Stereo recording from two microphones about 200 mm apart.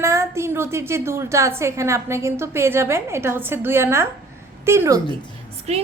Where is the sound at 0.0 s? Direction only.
15° right (ahead or behind).